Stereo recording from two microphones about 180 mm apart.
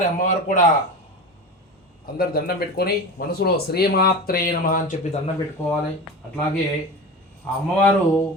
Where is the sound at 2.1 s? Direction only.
55° left (ahead or behind).